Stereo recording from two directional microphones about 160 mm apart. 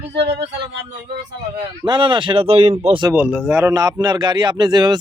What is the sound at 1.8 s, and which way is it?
Speech, 30° right (ahead or behind).